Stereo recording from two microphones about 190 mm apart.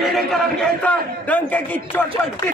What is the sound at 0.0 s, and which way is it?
A man's voice, centre (ahead or behind).